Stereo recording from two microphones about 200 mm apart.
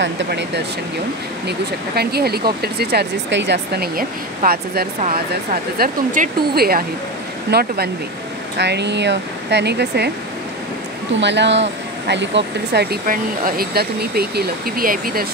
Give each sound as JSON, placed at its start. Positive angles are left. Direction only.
{"t": 0.0, "sound": "speech", "side_deg": -60}
{"t": 2.0, "sound": "speech", "side_deg": -50}
{"t": 11.1, "sound": "speech", "side_deg": -60}